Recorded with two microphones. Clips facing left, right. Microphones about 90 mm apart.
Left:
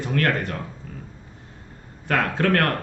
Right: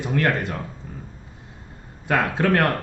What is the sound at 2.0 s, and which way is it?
Speech, 15° right (ahead or behind).